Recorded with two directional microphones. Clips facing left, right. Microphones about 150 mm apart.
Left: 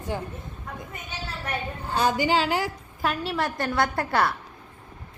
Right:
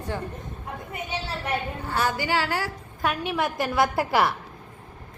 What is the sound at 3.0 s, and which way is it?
A woman's voice, centre (ahead or behind).